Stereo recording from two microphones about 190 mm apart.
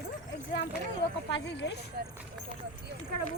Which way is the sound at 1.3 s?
65° left (ahead or behind).